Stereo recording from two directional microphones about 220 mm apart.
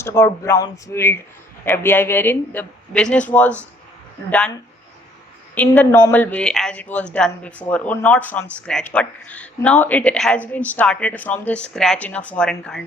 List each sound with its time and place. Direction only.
0.0 s speech: 15° left (ahead or behind)
5.5 s speech: 5° left (ahead or behind)